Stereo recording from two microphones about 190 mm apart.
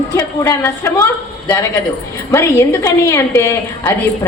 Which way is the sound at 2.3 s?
15° left (ahead or behind).